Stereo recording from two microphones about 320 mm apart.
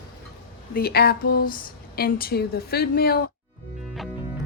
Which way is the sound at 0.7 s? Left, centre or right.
Left.